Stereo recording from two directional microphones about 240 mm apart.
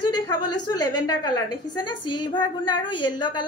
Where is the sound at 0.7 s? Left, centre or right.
Centre.